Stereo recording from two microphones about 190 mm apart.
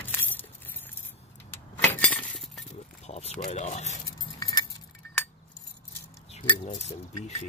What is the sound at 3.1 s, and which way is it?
Speech, 35° left (ahead or behind).